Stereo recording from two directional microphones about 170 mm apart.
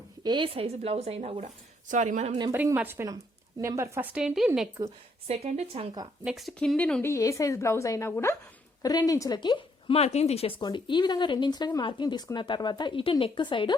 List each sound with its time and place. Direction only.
0.2 s speech: 25° right (ahead or behind); by 2.4 s 45° right (ahead or behind)
2.5 s a woman's voice: 10° right (ahead or behind)
5.3 s speech: 35° right (ahead or behind)
6.2 s speech: centre (ahead or behind); by 13.7 s 30° left (ahead or behind)